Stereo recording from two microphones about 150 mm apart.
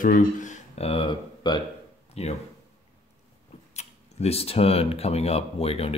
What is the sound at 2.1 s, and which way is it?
Speech, 45° left (ahead or behind).